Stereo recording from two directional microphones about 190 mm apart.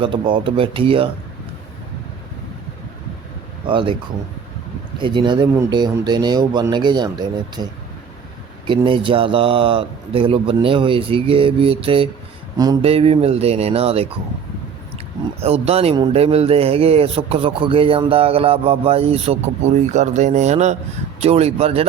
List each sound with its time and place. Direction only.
0.0 s speech: 25° right (ahead or behind)
3.7 s speech: 25° right (ahead or behind)
4.9 s speech: 25° right (ahead or behind)
12.8 s speech: 30° right (ahead or behind)